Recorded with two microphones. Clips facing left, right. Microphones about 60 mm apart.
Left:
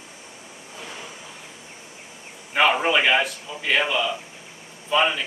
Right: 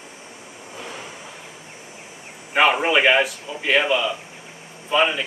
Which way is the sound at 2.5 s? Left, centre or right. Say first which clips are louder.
Right 2 dB; centre.